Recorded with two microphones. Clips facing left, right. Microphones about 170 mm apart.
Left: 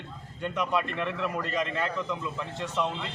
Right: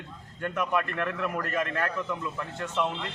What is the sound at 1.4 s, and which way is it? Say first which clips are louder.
Speech: even; 15° left (ahead or behind).